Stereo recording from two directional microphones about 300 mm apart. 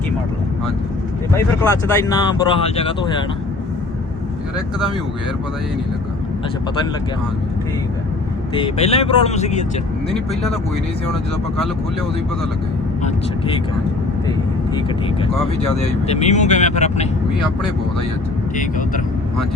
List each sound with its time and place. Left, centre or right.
1.3 s speech: centre
8.5 s speech: centre
13.0 s speech: left
16.0 s speech: left
18.5 s speech: left